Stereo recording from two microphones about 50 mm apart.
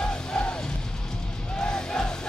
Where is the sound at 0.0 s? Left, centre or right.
Centre.